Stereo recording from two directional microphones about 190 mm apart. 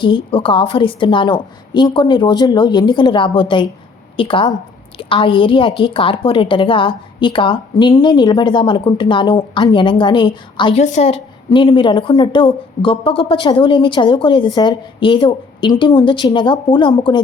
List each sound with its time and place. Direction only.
0.0 s a woman's voice: 25° left (ahead or behind)